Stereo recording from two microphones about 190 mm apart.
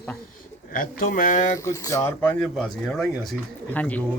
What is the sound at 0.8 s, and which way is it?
Speech, 45° left (ahead or behind).